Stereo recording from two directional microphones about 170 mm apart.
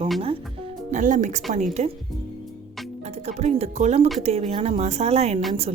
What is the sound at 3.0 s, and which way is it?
A woman's voice, 40° right (ahead or behind).